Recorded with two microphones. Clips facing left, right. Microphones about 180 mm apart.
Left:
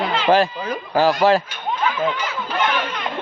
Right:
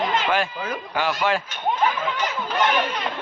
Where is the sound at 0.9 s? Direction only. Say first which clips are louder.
Left 8 dB; 35° left (ahead or behind).